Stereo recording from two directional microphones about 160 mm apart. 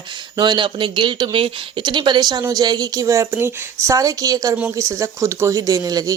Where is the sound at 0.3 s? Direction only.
30° right (ahead or behind).